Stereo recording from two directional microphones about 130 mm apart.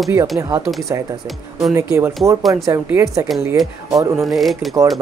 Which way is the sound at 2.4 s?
Centre (ahead or behind).